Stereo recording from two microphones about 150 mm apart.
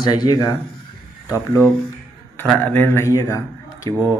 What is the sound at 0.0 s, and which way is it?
Speech, 30° left (ahead or behind).